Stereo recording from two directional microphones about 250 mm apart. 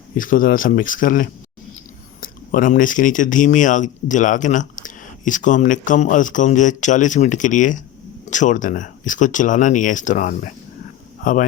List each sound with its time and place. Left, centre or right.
0.2 s speech: left